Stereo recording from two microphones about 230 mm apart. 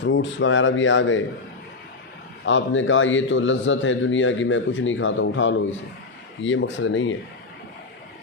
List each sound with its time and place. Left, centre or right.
0.0 s a man's voice: left
2.4 s a man's voice: left